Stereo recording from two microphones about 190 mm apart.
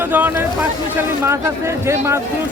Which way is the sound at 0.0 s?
10° right (ahead or behind).